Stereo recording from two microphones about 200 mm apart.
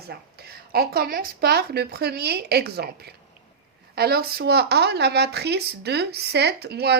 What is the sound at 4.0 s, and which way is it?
Speech, 50° right (ahead or behind).